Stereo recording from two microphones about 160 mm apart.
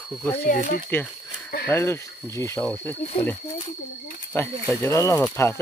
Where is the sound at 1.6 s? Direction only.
15° left (ahead or behind).